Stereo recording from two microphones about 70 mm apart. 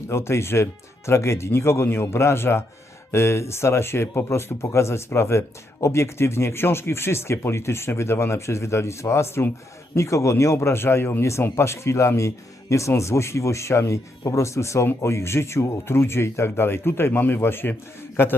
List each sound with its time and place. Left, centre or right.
0.1 s speech: left